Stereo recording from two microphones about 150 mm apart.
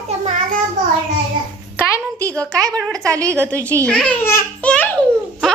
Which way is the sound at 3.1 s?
20° right (ahead or behind).